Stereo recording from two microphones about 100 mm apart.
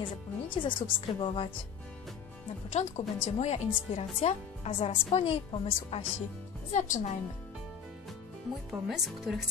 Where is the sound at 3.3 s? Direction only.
90° left; by 6.0 s 70° left (ahead or behind).